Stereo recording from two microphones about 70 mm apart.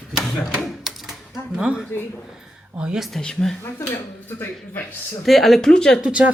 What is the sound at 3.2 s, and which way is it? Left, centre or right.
Speech, centre.